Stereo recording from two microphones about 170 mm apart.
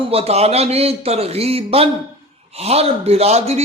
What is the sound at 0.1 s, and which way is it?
A man's voice, 35° right (ahead or behind).